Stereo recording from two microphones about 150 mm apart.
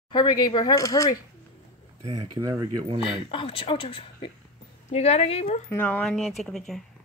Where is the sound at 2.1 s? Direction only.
25° right (ahead or behind).